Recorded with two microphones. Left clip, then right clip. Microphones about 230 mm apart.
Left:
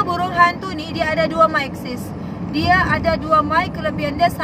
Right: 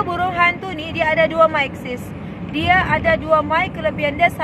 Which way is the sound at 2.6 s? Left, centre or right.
Left.